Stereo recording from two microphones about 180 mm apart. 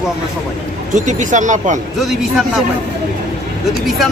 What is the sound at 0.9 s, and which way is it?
Speech, 45° right (ahead or behind).